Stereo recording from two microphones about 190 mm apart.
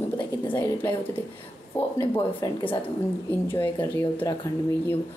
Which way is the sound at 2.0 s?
30° left (ahead or behind).